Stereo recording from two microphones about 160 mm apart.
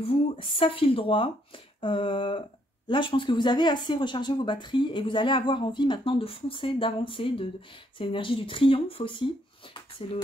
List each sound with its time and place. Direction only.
0.0 s speech: 35° left (ahead or behind)